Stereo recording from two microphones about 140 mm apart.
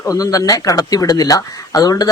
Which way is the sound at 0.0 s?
25° left (ahead or behind).